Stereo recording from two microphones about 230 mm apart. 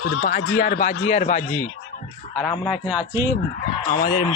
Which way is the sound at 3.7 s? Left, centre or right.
Left.